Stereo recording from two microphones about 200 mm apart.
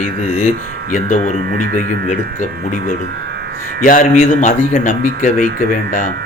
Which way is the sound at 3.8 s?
45° left (ahead or behind).